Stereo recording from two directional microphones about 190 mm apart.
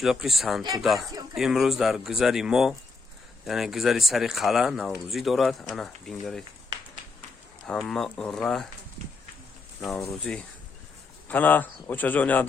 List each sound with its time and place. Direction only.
0.0 s speech: centre (ahead or behind)
7.7 s speech: 5° left (ahead or behind)
9.8 s speech: centre (ahead or behind)